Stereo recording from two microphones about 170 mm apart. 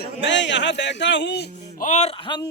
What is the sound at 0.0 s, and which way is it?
Speech, 90° left.